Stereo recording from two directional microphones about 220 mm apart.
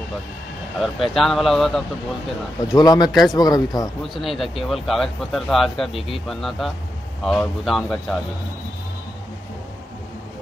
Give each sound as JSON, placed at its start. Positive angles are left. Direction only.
{"t": 0.7, "sound": "speech", "side_deg": 0}
{"t": 2.7, "sound": "speech", "side_deg": 15}
{"t": 3.1, "sound": "speech", "side_deg": 0}
{"t": 3.3, "sound": "speech", "side_deg": 15}
{"t": 4.0, "sound": "speech", "side_deg": 0}